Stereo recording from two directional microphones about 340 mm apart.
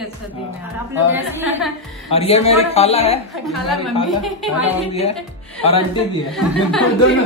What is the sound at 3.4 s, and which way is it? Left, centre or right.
A woman's voice, centre.